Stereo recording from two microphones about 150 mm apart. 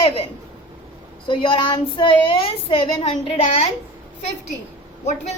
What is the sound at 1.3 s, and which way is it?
A woman's voice, 35° left (ahead or behind).